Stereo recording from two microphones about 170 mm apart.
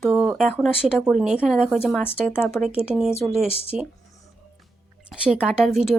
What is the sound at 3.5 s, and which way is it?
Speech, 35° left (ahead or behind).